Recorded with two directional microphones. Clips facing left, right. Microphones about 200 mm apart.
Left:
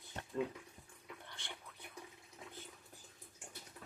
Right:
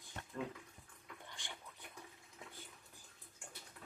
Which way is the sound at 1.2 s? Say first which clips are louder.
Even; 15° right (ahead or behind).